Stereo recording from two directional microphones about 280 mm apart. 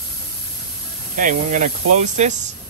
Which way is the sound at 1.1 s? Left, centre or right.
Right.